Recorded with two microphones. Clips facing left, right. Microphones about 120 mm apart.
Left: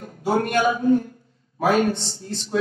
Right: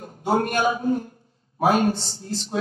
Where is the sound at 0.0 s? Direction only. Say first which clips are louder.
Even; 30° right (ahead or behind).